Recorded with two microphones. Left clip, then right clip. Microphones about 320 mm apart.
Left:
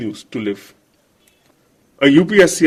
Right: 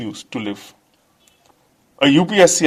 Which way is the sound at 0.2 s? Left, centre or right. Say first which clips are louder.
Left 1 dB; right.